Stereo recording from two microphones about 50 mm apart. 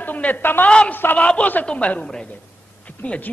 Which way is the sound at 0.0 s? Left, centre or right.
Left.